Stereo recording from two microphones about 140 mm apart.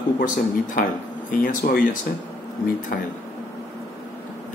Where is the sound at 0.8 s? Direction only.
90° left.